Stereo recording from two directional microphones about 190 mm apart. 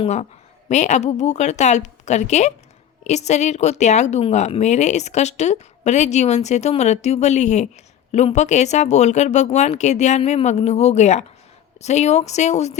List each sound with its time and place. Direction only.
0.0 s speech: 35° left (ahead or behind)